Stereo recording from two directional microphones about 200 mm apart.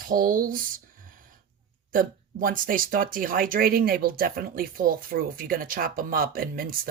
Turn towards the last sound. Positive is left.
turn(degrees=-45)  # may be behind; listen again after turning